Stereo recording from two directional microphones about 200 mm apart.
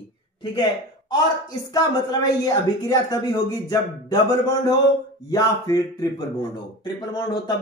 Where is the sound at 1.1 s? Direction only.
20° left (ahead or behind).